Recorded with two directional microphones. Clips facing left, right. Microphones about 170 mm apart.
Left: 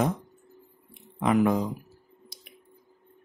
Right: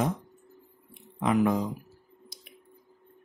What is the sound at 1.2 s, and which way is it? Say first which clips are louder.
Speech: left 2 dB; 55° left (ahead or behind).